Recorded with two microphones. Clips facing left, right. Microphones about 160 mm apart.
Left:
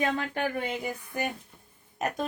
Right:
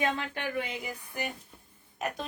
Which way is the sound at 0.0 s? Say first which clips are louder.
Left 3 dB; 45° left (ahead or behind).